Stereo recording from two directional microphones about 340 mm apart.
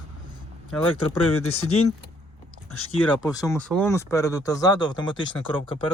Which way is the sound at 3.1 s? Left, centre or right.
Centre.